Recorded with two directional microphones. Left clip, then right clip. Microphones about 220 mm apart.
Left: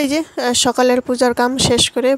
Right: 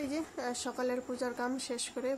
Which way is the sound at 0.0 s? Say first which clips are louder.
Left 19 dB; 40° left (ahead or behind).